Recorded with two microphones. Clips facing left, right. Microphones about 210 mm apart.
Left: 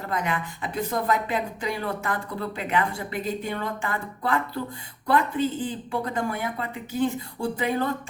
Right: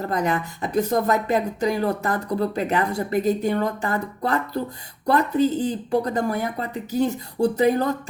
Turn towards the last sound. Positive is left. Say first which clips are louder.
# right 6 dB
turn(degrees=-40)  # may be behind; listen again after turning